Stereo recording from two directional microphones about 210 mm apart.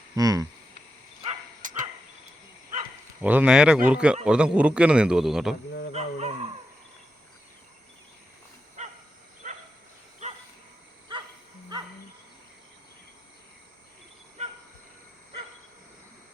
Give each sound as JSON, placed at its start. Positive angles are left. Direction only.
{"t": 0.2, "sound": "a sound", "side_deg": -15}
{"t": 1.2, "sound": "dog", "side_deg": -35}
{"t": 3.2, "sound": "a man's voice", "side_deg": -10}
{"t": 5.9, "sound": "wild animals", "side_deg": -30}
{"t": 8.8, "sound": "dog", "side_deg": -35}
{"t": 14.4, "sound": "train", "side_deg": -30}